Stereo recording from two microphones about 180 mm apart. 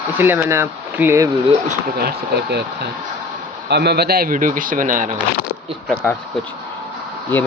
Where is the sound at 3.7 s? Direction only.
65° right (ahead or behind); by 5.1 s 45° right (ahead or behind).